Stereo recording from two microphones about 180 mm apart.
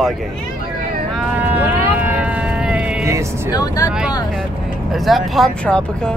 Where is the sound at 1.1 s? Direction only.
10° right (ahead or behind).